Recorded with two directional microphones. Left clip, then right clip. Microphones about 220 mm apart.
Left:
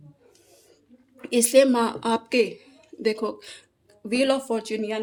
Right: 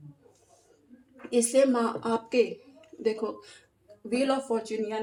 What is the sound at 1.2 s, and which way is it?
Speech, 40° left (ahead or behind).